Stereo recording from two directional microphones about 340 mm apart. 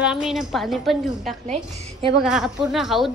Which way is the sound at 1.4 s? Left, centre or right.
Centre.